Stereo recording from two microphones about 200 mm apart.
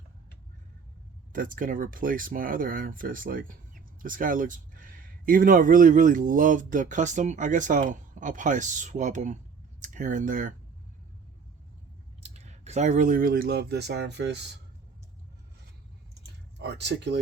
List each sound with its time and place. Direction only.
1.3 s speech: 45° right (ahead or behind)
12.2 s speech: 35° right (ahead or behind); by 14.4 s 60° right (ahead or behind)
16.2 s a sound: 60° right (ahead or behind)